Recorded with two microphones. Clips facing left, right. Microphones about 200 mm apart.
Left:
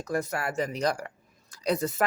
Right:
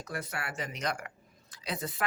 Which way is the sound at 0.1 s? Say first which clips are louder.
Left 9 dB; 40° left (ahead or behind).